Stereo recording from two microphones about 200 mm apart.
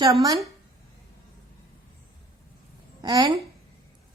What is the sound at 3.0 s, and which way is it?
Speech, 20° right (ahead or behind).